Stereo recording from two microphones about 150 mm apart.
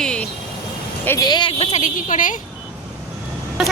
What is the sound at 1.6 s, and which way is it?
Speech, 45° left (ahead or behind).